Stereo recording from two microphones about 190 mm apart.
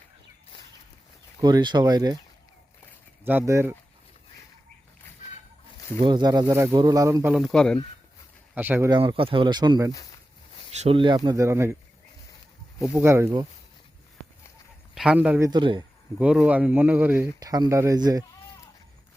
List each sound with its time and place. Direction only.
1.4 s speech: 20° right (ahead or behind)
3.2 s speech: 10° right (ahead or behind)
6.0 s speech: 25° right (ahead or behind)
7.3 s speech: centre (ahead or behind)
8.5 s speech: 10° right (ahead or behind)
8.9 s speech: 25° right (ahead or behind)
9.9 s speech: 20° left (ahead or behind)
10.8 s speech: 30° right (ahead or behind); by 11.8 s 15° right (ahead or behind)
12.8 s speech: 10° right (ahead or behind)
14.9 s a man's voice: 5° right (ahead or behind)
15.4 s speech: 25° right (ahead or behind)
16.1 s speech: 5° right (ahead or behind)
17.4 s speech: 20° right (ahead or behind)